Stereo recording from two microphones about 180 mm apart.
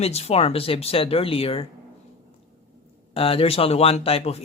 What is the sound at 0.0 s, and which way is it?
Speech, 35° left (ahead or behind).